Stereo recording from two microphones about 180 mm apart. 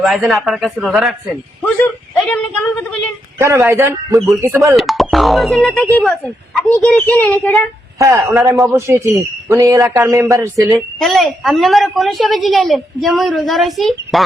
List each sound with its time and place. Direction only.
0.0 s a woman's voice: centre (ahead or behind)
1.8 s a sound: 10° left (ahead or behind)
3.4 s speech: 15° right (ahead or behind)
4.8 s a woman's voice: centre (ahead or behind)
7.9 s speech: 15° right (ahead or behind)
10.8 s a woman's voice: centre (ahead or behind)